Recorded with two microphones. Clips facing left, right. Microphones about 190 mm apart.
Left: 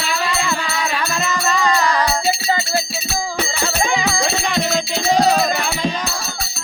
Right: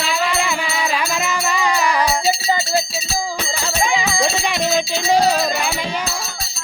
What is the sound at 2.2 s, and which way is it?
Music, 55° left (ahead or behind).